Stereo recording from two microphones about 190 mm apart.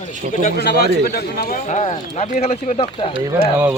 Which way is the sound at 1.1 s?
50° left (ahead or behind).